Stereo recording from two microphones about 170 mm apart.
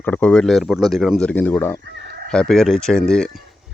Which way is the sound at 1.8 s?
70° right (ahead or behind).